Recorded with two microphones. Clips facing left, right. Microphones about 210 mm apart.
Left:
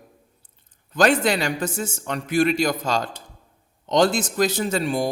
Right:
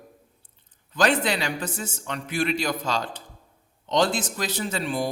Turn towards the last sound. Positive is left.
turn(degrees=45)  # may be behind; listen again after turning